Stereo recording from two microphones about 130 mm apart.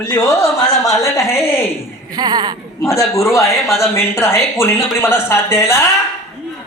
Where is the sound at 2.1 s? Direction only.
30° right (ahead or behind).